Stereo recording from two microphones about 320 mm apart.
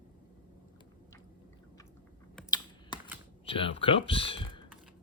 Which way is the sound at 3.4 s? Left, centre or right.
Centre.